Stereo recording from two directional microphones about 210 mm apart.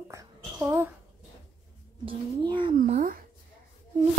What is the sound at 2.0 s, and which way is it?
Speech, 25° right (ahead or behind).